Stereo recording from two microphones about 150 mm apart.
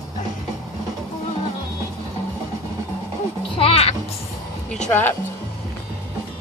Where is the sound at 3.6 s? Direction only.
40° left (ahead or behind).